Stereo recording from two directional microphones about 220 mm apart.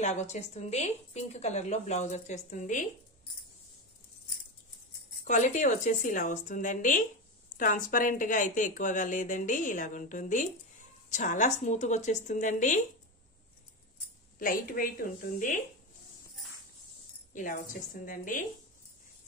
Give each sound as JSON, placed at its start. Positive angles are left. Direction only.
{"t": 0.0, "sound": "a woman's voice", "side_deg": 30}
{"t": 5.2, "sound": "a woman's voice", "side_deg": 35}
{"t": 14.4, "sound": "a woman's voice", "side_deg": 40}
{"t": 17.3, "sound": "a woman's voice", "side_deg": 35}